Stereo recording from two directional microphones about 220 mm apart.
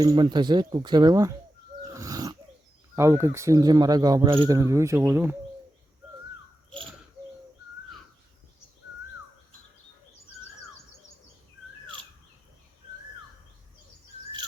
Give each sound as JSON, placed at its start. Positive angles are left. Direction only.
{"t": 0.0, "sound": "speech", "side_deg": -20}
{"t": 1.9, "sound": "a sound", "side_deg": -15}
{"t": 2.9, "sound": "speech", "side_deg": -10}